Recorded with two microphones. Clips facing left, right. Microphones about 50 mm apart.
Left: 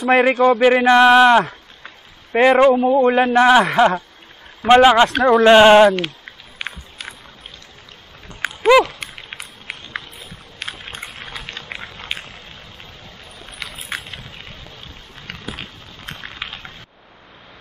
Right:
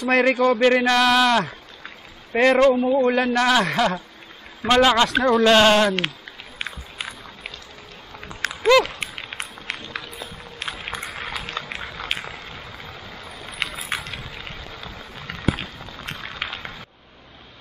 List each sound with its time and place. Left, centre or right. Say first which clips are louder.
0.0 s a man's voice: left 4 dB; centre
0.6 s male singing: left 4 dB; centre
0.9 s a man's voice: left 7 dB; left
8.4 s a sound: left 4 dB; centre